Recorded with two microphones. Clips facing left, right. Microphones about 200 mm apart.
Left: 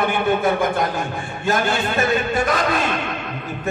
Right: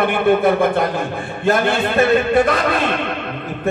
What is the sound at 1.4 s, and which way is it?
A man's voice, 60° right (ahead or behind).